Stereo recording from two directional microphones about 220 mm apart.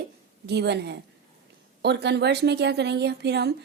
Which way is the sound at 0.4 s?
50° right (ahead or behind).